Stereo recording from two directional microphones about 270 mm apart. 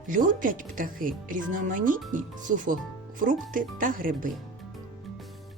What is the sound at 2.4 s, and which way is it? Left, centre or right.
Speech, right.